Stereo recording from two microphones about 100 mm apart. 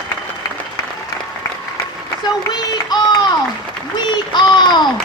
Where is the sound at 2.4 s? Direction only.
45° left (ahead or behind).